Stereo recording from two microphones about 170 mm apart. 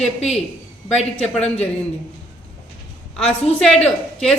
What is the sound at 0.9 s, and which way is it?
Speech, 40° left (ahead or behind).